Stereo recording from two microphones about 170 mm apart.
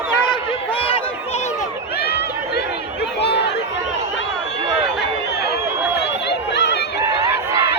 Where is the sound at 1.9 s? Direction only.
70° left (ahead or behind); by 3.6 s 90° left.